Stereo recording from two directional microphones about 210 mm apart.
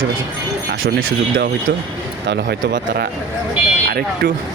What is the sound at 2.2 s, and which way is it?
Speech, 55° right (ahead or behind).